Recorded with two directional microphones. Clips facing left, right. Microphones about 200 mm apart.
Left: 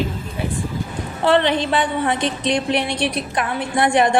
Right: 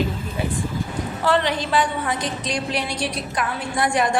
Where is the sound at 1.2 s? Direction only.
25° left (ahead or behind).